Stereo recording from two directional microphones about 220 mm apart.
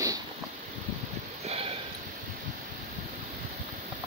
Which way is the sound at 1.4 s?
30° right (ahead or behind).